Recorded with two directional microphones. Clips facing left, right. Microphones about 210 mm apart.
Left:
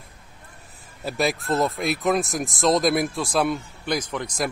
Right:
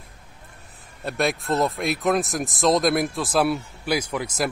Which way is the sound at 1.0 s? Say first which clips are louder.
Even; centre (ahead or behind).